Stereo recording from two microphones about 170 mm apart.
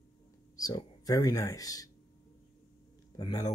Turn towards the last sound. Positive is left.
turn(degrees=25)  # may be behind; listen again after turning